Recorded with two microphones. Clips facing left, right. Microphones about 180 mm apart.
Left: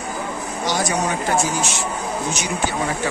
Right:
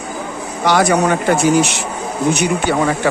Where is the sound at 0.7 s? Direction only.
65° right (ahead or behind).